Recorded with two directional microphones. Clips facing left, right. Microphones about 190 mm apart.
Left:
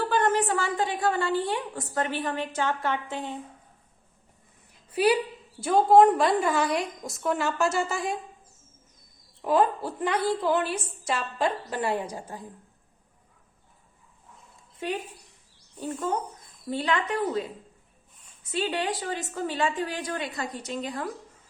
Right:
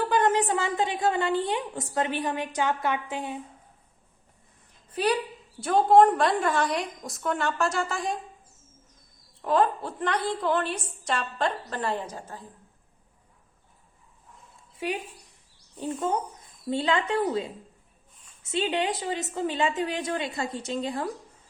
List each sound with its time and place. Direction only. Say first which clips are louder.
0.1 s a woman's voice: right 1 dB; 15° right (ahead or behind)
4.9 s a woman's voice: left 3 dB; 10° left (ahead or behind)
9.4 s a woman's voice: left 1 dB; 5° left (ahead or behind)
16.6 s a woman's voice: right 2 dB; 25° right (ahead or behind)
18.5 s a woman's voice: right 1 dB; 20° right (ahead or behind)